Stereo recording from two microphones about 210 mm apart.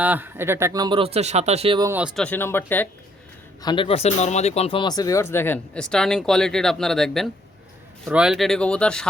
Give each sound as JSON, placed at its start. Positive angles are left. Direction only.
{"t": 0.0, "sound": "speech", "side_deg": -10}
{"t": 2.1, "sound": "speech", "side_deg": 5}
{"t": 3.6, "sound": "speech", "side_deg": 20}